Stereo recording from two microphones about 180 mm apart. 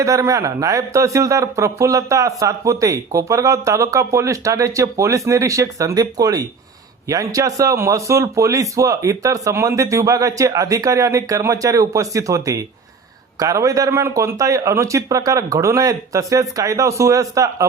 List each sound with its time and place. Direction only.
0.0 s a man's voice: 15° right (ahead or behind)